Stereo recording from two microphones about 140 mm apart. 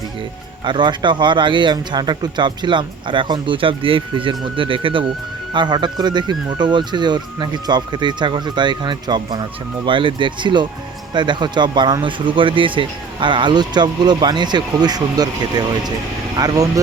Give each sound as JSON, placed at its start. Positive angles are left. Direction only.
{"t": 0.6, "sound": "speech", "side_deg": -35}